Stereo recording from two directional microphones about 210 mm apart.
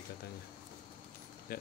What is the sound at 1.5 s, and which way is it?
Speech, 45° left (ahead or behind).